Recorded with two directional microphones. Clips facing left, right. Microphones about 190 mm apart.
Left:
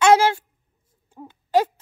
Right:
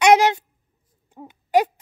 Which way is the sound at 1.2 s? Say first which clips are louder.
Right 1 dB; 15° right (ahead or behind).